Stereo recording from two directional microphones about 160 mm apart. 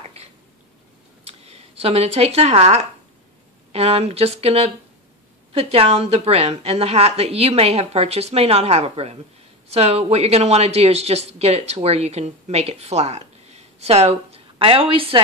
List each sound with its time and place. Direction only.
1.2 s a woman's voice: 40° right (ahead or behind)